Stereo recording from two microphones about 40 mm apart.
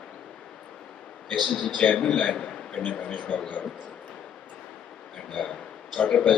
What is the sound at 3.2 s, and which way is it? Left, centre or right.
Speech, left.